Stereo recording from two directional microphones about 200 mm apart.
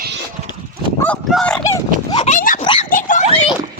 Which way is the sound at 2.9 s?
40° left (ahead or behind).